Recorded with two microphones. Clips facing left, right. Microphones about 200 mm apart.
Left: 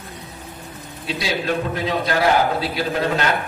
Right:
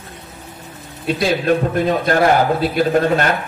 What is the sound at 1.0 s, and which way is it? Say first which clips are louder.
A man's voice: right 6 dB; 55° right (ahead or behind).